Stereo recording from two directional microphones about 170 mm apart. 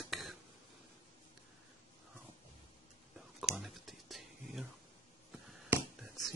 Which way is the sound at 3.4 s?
5° right (ahead or behind).